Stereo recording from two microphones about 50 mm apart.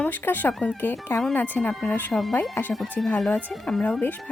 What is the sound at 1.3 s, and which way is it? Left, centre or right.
A woman's voice, left.